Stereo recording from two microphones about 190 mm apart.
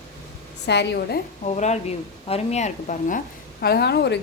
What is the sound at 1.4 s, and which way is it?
Speech, 35° left (ahead or behind).